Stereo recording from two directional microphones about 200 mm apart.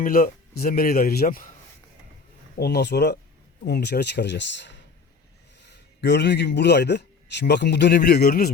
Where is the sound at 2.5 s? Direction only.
55° left (ahead or behind).